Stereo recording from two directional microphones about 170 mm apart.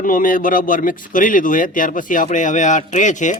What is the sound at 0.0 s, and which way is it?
A man's voice, 55° left (ahead or behind).